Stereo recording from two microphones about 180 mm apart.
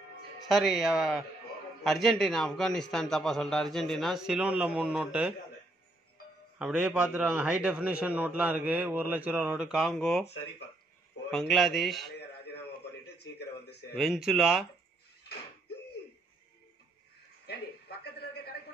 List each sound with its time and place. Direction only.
0.5 s a man's voice: centre (ahead or behind)
6.6 s a man's voice: 5° right (ahead or behind)
11.2 s a man's voice: centre (ahead or behind)
13.0 s a sound: 65° left (ahead or behind)
13.9 s a man's voice: centre (ahead or behind)
17.5 s a sound: 60° left (ahead or behind)